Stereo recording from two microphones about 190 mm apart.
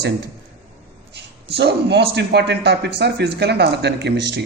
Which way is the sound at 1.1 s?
60° right (ahead or behind).